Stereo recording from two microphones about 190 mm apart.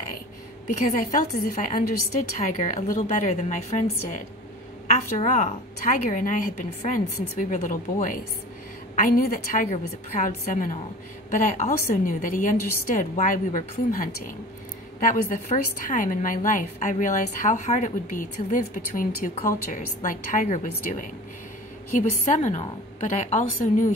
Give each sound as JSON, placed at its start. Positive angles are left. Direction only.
{"t": 0.7, "sound": "a woman's voice", "side_deg": 40}
{"t": 22.3, "sound": "a woman's voice", "side_deg": 35}